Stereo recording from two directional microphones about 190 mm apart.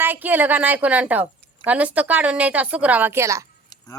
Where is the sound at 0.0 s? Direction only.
10° right (ahead or behind).